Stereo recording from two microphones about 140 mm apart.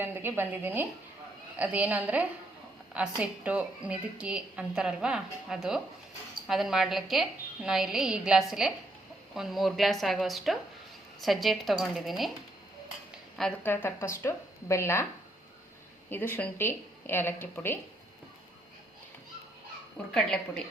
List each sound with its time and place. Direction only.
0.0 s a woman's voice: 15° right (ahead or behind)
13.6 s a woman's voice: 15° left (ahead or behind)
16.0 s a woman's voice: 15° left (ahead or behind)
20.1 s a woman's voice: 5° left (ahead or behind)